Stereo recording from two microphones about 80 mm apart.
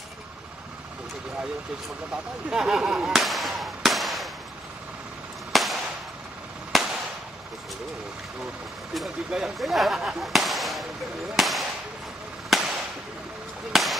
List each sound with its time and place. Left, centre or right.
2.5 s firecracker: centre
5.5 s firecracker: centre
8.9 s speech: centre
12.4 s firecracker: centre
13.7 s speech: centre